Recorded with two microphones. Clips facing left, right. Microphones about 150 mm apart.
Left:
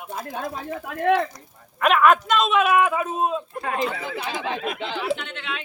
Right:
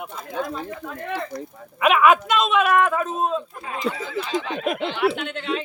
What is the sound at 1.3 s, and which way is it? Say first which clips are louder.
Speech: right 8 dB; 5° right (ahead or behind).